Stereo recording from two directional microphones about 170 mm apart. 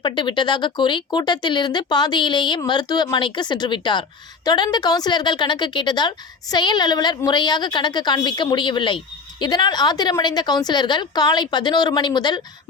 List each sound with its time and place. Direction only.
0.0 s a woman's voice: 25° left (ahead or behind)